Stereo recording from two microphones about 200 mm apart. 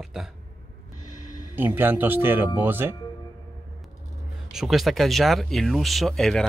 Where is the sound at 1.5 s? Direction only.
10° right (ahead or behind).